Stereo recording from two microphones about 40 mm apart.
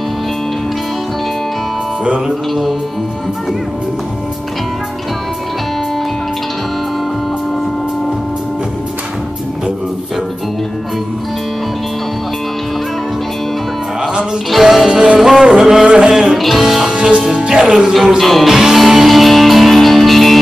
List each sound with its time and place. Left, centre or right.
2.0 s music: right
14.5 s music: centre
14.9 s music: right
15.1 s music: centre
15.8 s a sound: right
16.3 s music: centre
16.9 s music: right
18.2 s music: centre
18.5 s music: centre